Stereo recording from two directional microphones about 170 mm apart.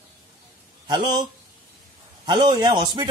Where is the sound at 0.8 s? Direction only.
25° right (ahead or behind).